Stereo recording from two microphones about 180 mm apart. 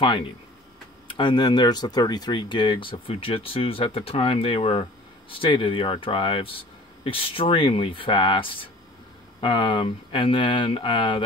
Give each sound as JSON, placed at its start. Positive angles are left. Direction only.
{"t": 0.0, "sound": "speech", "side_deg": 30}